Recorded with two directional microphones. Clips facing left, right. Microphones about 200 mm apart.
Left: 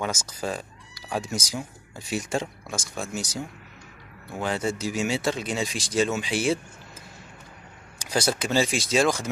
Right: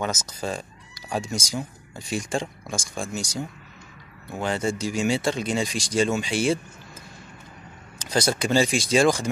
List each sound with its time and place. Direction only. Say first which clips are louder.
0.0 s speech: right 1 dB; 10° left (ahead or behind)
8.0 s speech: right 2 dB; 5° left (ahead or behind)